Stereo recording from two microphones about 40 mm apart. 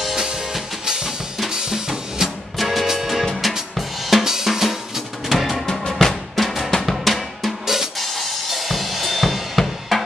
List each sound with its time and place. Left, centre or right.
0.8 s drum kit: centre
2.5 s music: centre
3.5 s drum kit: centre
4.5 s drum: centre
5.7 s music: centre
6.9 s drum: centre
7.6 s drum: centre
8.0 s drum kit: centre